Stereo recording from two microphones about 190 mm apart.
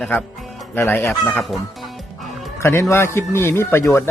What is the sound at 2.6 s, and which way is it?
A man's voice, 15° left (ahead or behind).